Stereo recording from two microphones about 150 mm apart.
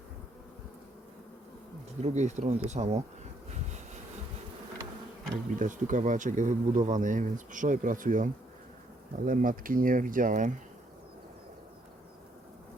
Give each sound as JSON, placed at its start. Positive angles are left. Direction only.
{"t": 2.0, "sound": "speech", "side_deg": -50}
{"t": 5.5, "sound": "speech", "side_deg": -60}